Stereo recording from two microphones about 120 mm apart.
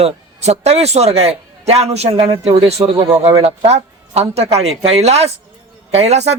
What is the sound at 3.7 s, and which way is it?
A woman's voice, 60° right (ahead or behind).